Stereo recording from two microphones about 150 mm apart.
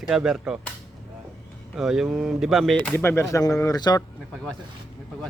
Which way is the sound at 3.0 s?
15° left (ahead or behind).